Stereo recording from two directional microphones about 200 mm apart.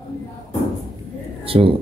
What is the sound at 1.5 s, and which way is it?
Speech, 25° right (ahead or behind).